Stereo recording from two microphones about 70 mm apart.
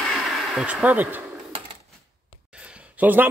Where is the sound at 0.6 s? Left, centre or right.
Right.